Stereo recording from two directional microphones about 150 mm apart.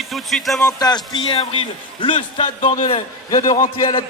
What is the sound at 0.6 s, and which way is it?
A man's voice, 25° left (ahead or behind).